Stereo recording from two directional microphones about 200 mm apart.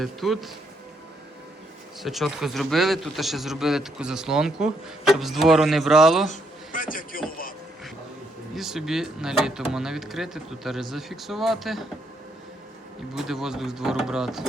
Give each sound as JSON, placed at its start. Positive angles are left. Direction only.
{"t": 0.0, "sound": "a man's voice", "side_deg": 0}
{"t": 2.0, "sound": "a man's voice", "side_deg": 0}
{"t": 6.3, "sound": "a man's voice", "side_deg": 45}
{"t": 8.5, "sound": "a man's voice", "side_deg": 0}
{"t": 13.1, "sound": "a man's voice", "side_deg": 0}